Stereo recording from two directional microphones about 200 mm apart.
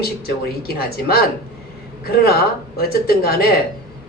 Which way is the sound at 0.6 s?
50° left (ahead or behind).